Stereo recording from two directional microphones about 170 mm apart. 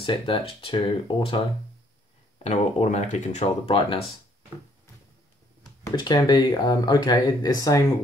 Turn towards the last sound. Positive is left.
turn(degrees=20)  # may be behind; listen again after turning